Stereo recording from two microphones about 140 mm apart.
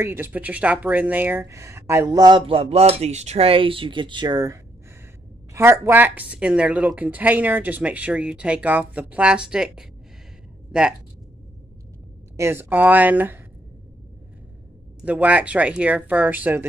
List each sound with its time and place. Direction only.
0.0 s a woman's voice: 15° right (ahead or behind)
2.4 s speech: 45° right (ahead or behind)
5.5 s a woman's voice: 20° right (ahead or behind)
12.4 s a woman's voice: 20° right (ahead or behind)
15.0 s a woman's voice: 10° right (ahead or behind)